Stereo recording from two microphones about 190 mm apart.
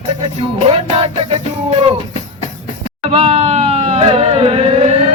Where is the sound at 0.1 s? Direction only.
30° right (ahead or behind).